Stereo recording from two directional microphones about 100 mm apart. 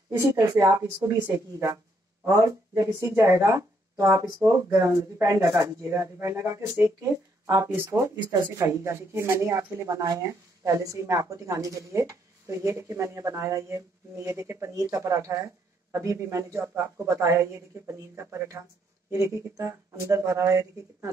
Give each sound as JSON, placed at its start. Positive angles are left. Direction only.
{"t": 0.2, "sound": "a woman's voice", "side_deg": -35}
{"t": 0.8, "sound": "speech", "side_deg": -20}
{"t": 1.3, "sound": "a woman's voice", "side_deg": -35}